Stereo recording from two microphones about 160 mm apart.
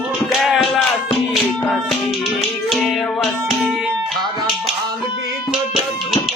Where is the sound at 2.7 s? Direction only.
Centre (ahead or behind).